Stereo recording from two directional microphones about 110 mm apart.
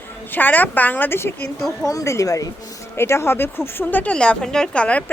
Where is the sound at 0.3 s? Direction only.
15° left (ahead or behind).